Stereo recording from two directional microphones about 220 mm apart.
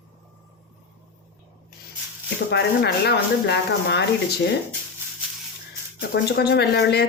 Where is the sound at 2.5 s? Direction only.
50° left (ahead or behind).